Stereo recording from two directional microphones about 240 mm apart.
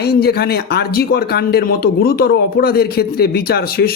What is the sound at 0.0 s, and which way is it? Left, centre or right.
Speech, left.